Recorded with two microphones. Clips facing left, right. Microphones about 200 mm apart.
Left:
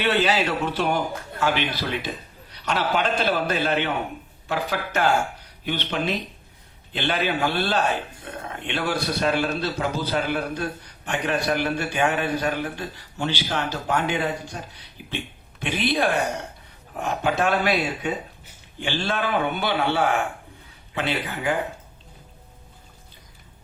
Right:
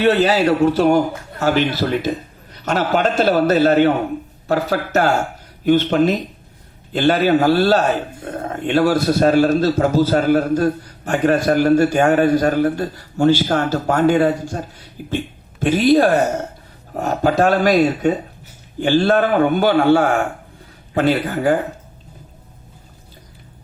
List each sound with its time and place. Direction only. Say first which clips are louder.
0.0 s a man's voice: right 7 dB; 40° right (ahead or behind)